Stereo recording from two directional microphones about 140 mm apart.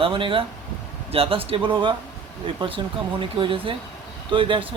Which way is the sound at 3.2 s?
40° right (ahead or behind).